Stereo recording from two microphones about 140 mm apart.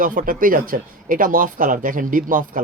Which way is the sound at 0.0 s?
75° right (ahead or behind).